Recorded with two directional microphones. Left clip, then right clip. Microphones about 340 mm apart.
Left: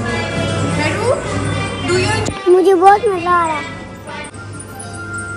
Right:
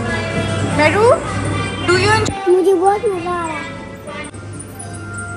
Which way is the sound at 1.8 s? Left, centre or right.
Centre.